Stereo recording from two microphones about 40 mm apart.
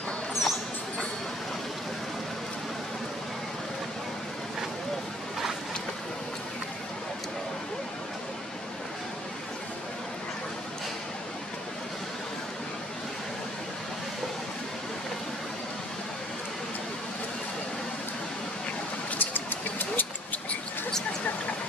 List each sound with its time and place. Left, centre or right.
0.3 s mouse: centre
19.1 s vehicle: left